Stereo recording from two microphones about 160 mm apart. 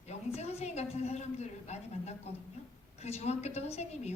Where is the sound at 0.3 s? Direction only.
40° left (ahead or behind).